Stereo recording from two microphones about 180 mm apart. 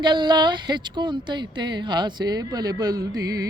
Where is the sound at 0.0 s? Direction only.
25° right (ahead or behind).